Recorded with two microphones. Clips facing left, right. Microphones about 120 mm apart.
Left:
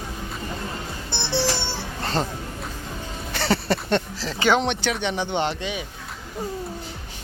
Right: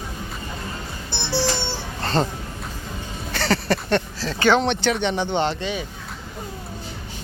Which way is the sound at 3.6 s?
20° left (ahead or behind).